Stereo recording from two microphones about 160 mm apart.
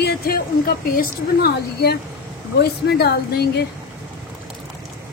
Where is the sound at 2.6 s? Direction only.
90° left.